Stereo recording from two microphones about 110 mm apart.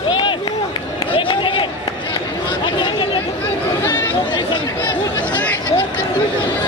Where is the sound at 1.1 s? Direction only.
50° left (ahead or behind).